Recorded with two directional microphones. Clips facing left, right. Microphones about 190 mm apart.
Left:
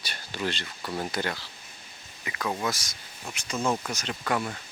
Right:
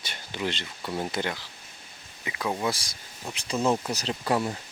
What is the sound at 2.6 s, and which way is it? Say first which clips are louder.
Speech: right 2 dB; 30° right (ahead or behind).